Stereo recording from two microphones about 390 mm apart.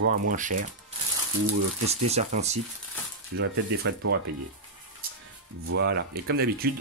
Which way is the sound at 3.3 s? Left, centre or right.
Right.